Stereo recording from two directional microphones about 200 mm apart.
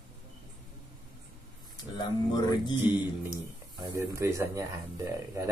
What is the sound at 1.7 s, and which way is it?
Speech, 20° left (ahead or behind).